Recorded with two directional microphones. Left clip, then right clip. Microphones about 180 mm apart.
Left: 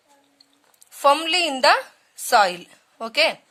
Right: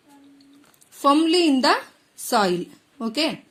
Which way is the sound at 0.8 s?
10° left (ahead or behind).